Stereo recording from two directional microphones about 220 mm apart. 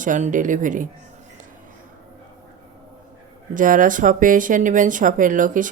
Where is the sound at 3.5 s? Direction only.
35° right (ahead or behind).